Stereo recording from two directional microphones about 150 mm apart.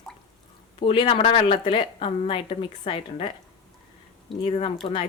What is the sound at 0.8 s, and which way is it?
Speech, 40° left (ahead or behind).